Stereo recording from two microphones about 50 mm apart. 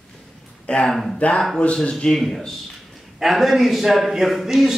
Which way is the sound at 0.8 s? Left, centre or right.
Centre.